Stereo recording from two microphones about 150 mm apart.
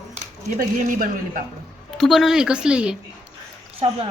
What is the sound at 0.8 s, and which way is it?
Speech, 65° right (ahead or behind).